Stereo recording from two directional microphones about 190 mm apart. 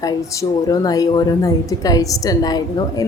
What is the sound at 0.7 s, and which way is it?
A woman's voice, 20° left (ahead or behind).